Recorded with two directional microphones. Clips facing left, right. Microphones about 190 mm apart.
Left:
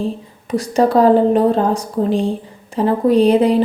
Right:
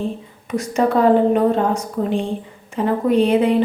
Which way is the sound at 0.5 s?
35° left (ahead or behind).